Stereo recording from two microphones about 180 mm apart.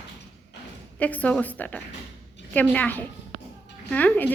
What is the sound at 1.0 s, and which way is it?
A woman's voice, 10° left (ahead or behind).